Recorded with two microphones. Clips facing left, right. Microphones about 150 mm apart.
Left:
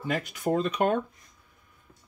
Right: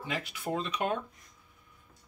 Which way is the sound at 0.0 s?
45° left (ahead or behind).